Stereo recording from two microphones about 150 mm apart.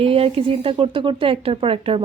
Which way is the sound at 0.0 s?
40° right (ahead or behind).